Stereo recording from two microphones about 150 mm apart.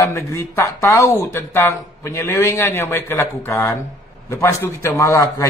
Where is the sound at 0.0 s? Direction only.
15° left (ahead or behind).